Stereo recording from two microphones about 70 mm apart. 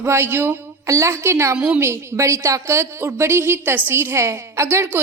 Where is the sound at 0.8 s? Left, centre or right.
Right.